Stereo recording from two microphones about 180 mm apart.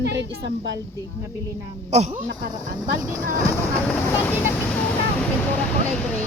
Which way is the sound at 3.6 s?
10° left (ahead or behind).